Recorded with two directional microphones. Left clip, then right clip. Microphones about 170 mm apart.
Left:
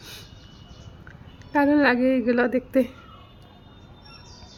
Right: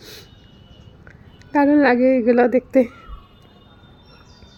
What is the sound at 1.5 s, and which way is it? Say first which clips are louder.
Speech: right 4 dB; 20° right (ahead or behind).